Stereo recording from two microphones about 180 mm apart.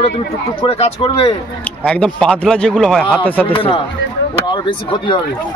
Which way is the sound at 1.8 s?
5° left (ahead or behind).